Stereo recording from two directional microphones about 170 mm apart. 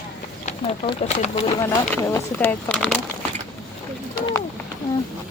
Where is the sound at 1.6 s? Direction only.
15° left (ahead or behind).